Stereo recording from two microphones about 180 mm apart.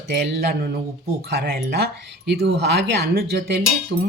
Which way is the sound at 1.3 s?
60° right (ahead or behind).